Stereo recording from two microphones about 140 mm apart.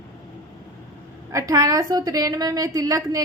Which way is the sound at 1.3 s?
25° right (ahead or behind).